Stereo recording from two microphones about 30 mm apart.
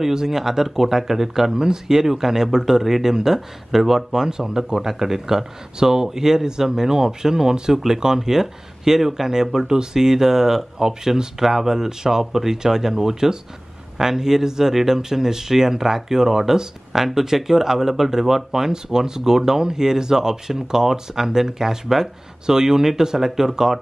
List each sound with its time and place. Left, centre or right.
0.0 s speech: centre
1.5 s speech: right